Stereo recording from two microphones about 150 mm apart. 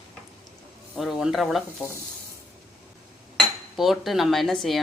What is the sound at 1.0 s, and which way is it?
Speech, centre (ahead or behind).